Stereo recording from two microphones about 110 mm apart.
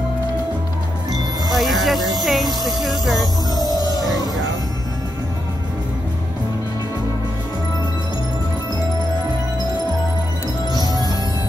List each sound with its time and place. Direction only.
1.5 s music: centre (ahead or behind)
2.2 s speech: centre (ahead or behind)
3.5 s music: 35° left (ahead or behind)
10.7 s music: 35° left (ahead or behind)